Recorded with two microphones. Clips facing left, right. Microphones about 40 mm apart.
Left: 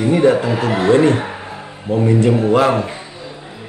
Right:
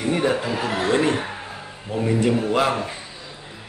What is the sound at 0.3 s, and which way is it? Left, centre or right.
Speech, centre.